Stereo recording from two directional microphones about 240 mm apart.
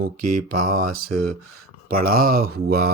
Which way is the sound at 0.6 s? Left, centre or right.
Right.